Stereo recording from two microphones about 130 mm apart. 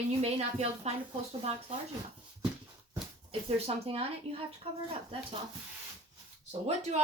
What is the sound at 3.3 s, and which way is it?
A woman's voice, 50° right (ahead or behind).